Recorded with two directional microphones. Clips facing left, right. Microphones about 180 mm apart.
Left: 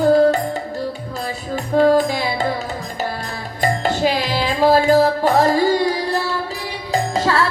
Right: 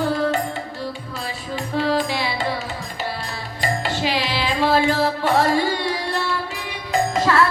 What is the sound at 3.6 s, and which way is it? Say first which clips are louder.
Music: left 5 dB; 45° left (ahead or behind).